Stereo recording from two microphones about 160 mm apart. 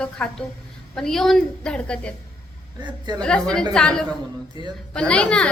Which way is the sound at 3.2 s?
5° left (ahead or behind).